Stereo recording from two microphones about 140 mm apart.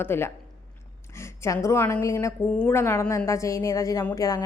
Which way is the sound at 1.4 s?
20° left (ahead or behind).